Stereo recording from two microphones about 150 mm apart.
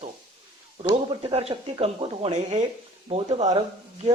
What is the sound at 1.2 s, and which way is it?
Speech, 40° right (ahead or behind).